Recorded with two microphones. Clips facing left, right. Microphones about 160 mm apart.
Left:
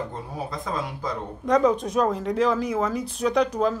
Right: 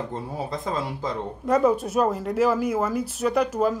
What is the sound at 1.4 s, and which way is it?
Speech, 5° right (ahead or behind).